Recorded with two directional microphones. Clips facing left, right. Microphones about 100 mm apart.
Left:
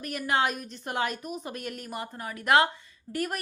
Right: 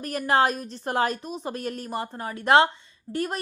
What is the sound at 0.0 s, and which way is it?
A woman's voice, 40° right (ahead or behind).